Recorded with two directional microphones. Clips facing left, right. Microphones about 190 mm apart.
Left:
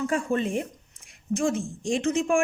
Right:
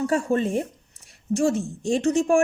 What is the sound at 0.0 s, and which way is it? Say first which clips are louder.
A woman's voice: right 3 dB; 40° right (ahead or behind).